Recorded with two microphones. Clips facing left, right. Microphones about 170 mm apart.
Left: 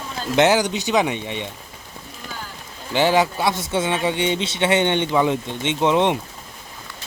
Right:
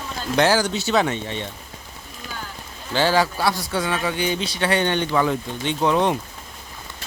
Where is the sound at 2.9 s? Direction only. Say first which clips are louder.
Left 2 dB; 20° left (ahead or behind).